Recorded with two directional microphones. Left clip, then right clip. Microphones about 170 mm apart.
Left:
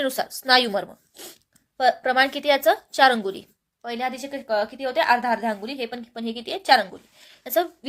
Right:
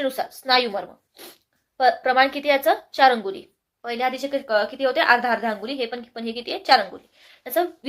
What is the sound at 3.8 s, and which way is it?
A woman's voice, 30° left (ahead or behind).